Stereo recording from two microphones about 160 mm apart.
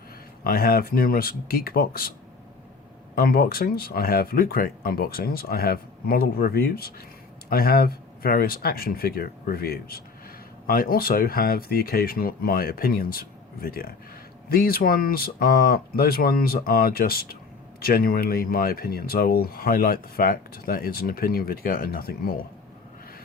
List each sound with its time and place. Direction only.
0.4 s speech: 70° left (ahead or behind)
3.2 s speech: 70° left (ahead or behind)